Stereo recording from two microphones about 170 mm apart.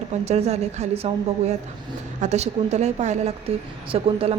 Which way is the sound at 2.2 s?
40° right (ahead or behind).